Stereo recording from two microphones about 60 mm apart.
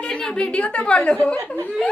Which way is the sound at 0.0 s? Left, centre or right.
Centre.